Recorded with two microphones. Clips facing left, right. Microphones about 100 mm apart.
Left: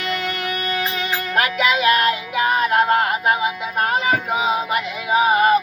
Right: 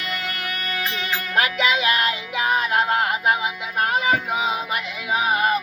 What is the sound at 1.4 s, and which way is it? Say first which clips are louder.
Music: left 2 dB; 20° right (ahead or behind).